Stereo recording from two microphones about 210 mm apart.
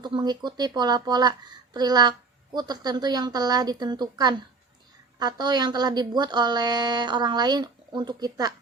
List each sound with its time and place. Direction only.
0.0 s speech: 20° right (ahead or behind)